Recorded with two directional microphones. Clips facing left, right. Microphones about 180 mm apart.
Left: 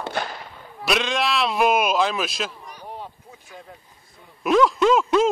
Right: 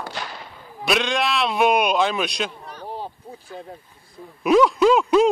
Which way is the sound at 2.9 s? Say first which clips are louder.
Right 5 dB; 30° right (ahead or behind).